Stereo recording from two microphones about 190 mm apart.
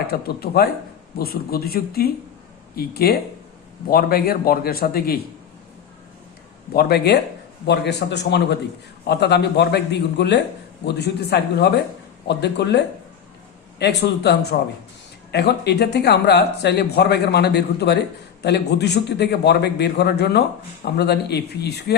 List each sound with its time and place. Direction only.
0.1 s a man's voice: 55° left (ahead or behind)
6.7 s speech: 60° left (ahead or behind)